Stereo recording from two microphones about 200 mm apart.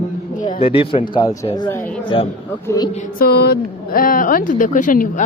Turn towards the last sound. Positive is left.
turn(degrees=40)  # may be behind; listen again after turning